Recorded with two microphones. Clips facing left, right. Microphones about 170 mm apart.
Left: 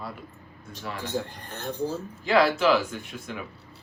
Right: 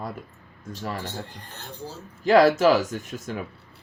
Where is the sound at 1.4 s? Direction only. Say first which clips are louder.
Left 8 dB; 55° left (ahead or behind).